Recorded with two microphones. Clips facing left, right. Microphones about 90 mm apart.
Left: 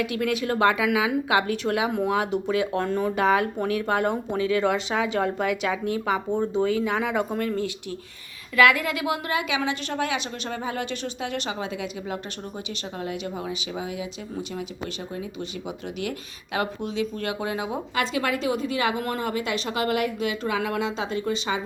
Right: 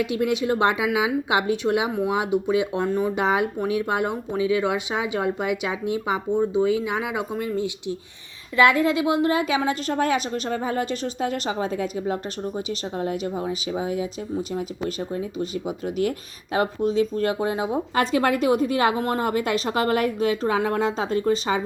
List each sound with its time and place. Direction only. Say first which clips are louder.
0.0 s speech: right 3 dB; 25° right (ahead or behind)
8.5 s a woman's voice: right 2 dB; 30° right (ahead or behind)
18.0 s a woman's voice: right 5 dB; 45° right (ahead or behind)
18.9 s a woman's voice: right 4 dB; 30° right (ahead or behind)
19.2 s a woman's voice: right 4 dB; 45° right (ahead or behind)